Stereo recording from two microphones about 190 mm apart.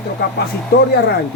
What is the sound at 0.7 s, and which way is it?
Speech, 55° left (ahead or behind).